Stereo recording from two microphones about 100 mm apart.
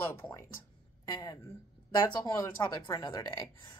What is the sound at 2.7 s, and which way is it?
Speech, 40° left (ahead or behind).